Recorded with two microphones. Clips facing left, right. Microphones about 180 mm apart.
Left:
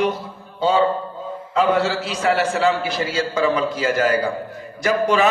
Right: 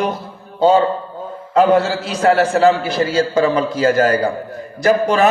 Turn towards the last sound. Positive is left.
turn(degrees=-40)  # may be behind; listen again after turning